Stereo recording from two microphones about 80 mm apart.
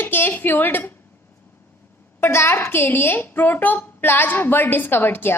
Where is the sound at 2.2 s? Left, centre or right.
Left.